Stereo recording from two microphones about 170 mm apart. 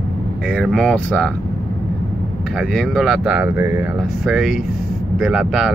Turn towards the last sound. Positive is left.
turn(degrees=0)  # may be behind; listen again after turning